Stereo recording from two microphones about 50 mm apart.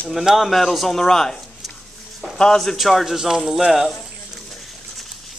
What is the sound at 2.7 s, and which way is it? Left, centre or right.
Speech, centre.